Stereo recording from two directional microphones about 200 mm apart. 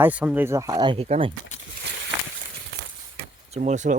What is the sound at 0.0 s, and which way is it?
Speech, 5° right (ahead or behind).